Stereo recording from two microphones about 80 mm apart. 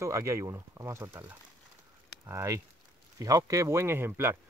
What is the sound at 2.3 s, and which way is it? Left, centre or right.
Speech, right.